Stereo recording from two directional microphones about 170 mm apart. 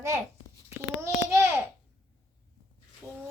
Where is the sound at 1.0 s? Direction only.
15° right (ahead or behind).